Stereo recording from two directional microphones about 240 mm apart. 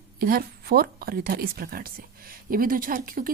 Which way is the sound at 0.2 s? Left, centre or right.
Right.